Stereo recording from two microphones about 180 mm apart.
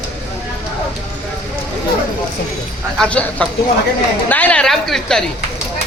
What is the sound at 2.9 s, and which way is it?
A man's voice, 5° left (ahead or behind).